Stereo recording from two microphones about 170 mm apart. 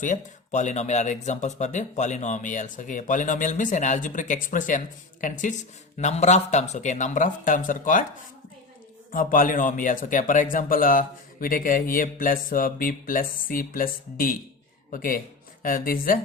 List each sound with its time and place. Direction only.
0.0 s speech: 50° left (ahead or behind)
9.1 s speech: 55° left (ahead or behind)